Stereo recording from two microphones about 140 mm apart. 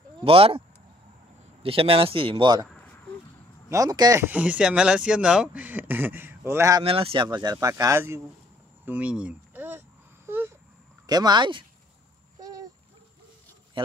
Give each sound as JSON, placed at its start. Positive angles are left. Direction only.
{"t": 0.2, "sound": "speech", "side_deg": -40}
{"t": 2.7, "sound": "a sound", "side_deg": 10}
{"t": 3.6, "sound": "speech", "side_deg": -25}
{"t": 4.2, "sound": "speech", "side_deg": -10}
{"t": 6.8, "sound": "speech", "side_deg": -40}
{"t": 7.2, "sound": "speech", "side_deg": -30}
{"t": 8.8, "sound": "a sound", "side_deg": -10}
{"t": 11.1, "sound": "speech", "side_deg": -30}
{"t": 12.4, "sound": "a sound", "side_deg": -25}
{"t": 13.8, "sound": "a man's voice", "side_deg": -35}